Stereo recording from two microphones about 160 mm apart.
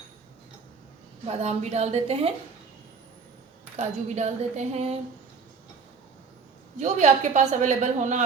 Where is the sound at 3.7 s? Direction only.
45° right (ahead or behind).